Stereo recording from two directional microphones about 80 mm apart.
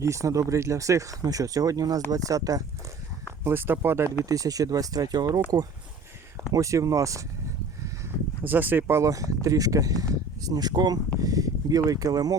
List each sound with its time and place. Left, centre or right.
0.0 s speech: right
3.4 s speech: right
4.3 s speech: right
6.5 s speech: right
8.4 s speech: right
11.2 s speech: right